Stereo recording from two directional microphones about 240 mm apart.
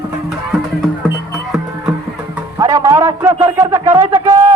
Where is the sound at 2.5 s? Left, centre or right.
Centre.